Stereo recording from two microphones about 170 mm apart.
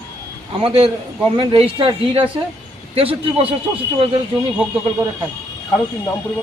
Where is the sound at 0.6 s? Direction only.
35° right (ahead or behind).